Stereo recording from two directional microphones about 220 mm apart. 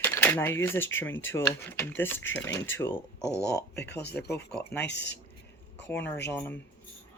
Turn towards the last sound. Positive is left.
turn(degrees=10)  # may be behind; listen again after turning